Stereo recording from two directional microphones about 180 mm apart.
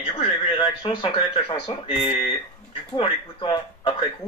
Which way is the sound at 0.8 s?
25° left (ahead or behind).